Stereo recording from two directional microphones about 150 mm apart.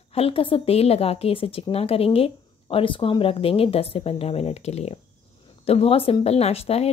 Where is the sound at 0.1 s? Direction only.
40° left (ahead or behind).